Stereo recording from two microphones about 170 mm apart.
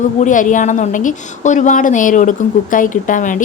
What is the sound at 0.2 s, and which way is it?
A woman's voice, 50° left (ahead or behind).